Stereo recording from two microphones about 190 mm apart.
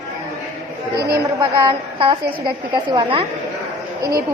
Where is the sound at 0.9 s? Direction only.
55° right (ahead or behind).